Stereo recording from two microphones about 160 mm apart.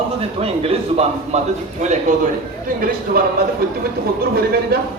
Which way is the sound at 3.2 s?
70° right (ahead or behind).